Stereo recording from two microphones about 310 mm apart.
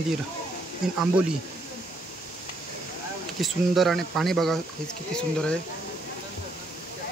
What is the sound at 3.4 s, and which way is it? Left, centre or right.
Speech, centre.